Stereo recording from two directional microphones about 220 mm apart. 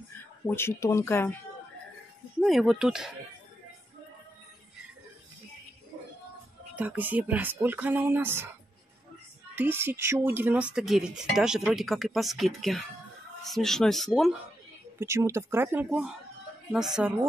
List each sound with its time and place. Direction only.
0.5 s speech: 10° left (ahead or behind)
2.4 s speech: centre (ahead or behind)
6.7 s speech: 10° right (ahead or behind)
9.6 s speech: 10° right (ahead or behind)
15.0 s speech: 10° right (ahead or behind)